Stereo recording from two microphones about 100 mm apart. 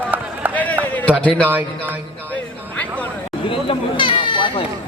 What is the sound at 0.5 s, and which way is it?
Run, 15° left (ahead or behind).